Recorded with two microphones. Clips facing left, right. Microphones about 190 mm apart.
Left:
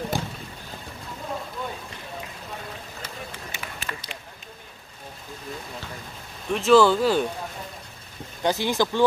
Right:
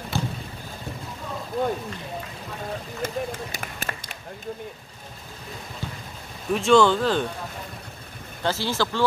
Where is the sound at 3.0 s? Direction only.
45° right (ahead or behind).